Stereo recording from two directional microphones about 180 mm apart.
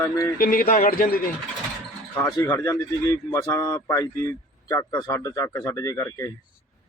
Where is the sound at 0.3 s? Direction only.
50° left (ahead or behind).